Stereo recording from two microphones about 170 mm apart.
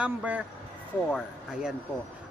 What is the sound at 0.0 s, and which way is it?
Speech, 10° right (ahead or behind).